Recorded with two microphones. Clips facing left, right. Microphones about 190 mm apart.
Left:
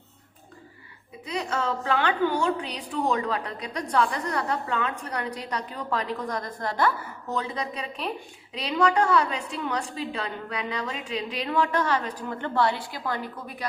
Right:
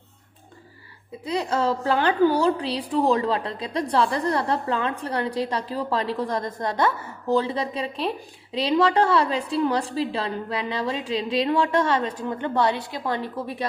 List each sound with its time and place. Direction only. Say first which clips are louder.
1.2 s a woman's voice: right 5 dB; 35° right (ahead or behind)